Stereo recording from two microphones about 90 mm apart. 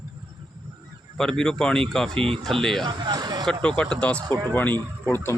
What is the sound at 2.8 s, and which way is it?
Speech, 55° right (ahead or behind).